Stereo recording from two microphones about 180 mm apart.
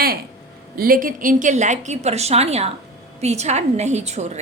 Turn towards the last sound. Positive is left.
turn(degrees=-40)  # may be behind; listen again after turning